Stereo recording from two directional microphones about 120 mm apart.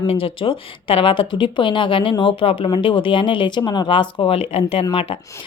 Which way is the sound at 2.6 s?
35° left (ahead or behind).